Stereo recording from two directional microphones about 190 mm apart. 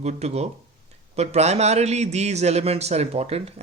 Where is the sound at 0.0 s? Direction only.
35° right (ahead or behind).